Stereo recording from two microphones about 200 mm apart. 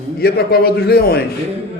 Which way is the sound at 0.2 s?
50° left (ahead or behind).